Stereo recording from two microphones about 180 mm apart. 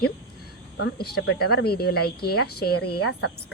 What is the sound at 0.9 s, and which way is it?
A woman's voice, 60° left (ahead or behind).